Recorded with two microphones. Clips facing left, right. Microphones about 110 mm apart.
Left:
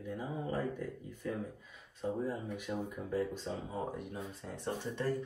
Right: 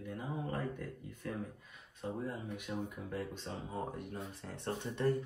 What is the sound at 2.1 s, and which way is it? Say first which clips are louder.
Speech: left 2 dB; centre (ahead or behind).